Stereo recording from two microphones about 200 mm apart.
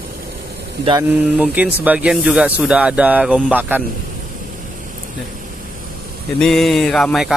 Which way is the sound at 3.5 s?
10° right (ahead or behind).